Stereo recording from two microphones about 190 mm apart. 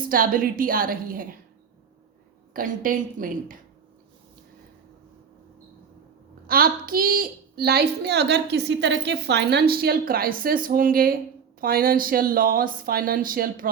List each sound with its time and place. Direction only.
0.0 s speech: 50° right (ahead or behind)
2.5 s speech: 50° right (ahead or behind)
6.5 s a woman's voice: 50° right (ahead or behind)